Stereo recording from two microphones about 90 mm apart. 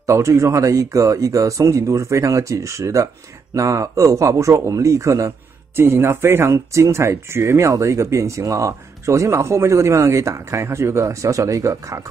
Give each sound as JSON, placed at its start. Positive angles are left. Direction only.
{"t": 0.0, "sound": "speech", "side_deg": -35}